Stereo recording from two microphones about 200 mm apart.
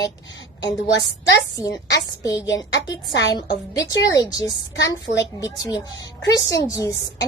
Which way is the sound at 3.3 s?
20° left (ahead or behind).